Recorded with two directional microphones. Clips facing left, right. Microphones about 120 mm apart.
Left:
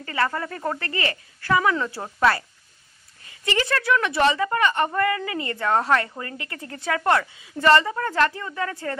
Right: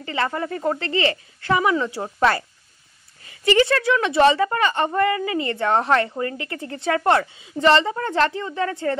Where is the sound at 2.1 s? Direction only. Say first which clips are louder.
Right 1 dB; 30° right (ahead or behind).